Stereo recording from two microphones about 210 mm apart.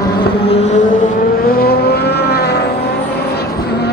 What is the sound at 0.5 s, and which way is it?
Vehicle, 30° left (ahead or behind).